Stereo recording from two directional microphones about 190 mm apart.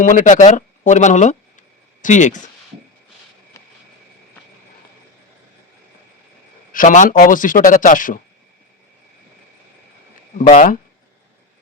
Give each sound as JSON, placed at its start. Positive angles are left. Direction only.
{"t": 0.0, "sound": "speech", "side_deg": 45}
{"t": 3.6, "sound": "a sound", "side_deg": 15}
{"t": 6.7, "sound": "speech", "side_deg": 40}
{"t": 10.3, "sound": "speech", "side_deg": 45}